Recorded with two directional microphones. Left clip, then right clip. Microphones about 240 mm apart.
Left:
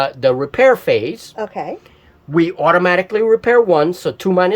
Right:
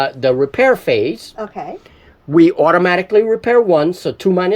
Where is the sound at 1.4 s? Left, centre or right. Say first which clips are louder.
Left 2 dB; left.